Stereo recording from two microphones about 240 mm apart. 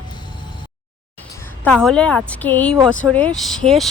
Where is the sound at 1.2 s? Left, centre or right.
Centre.